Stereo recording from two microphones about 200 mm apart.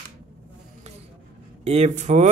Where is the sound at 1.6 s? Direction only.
35° right (ahead or behind).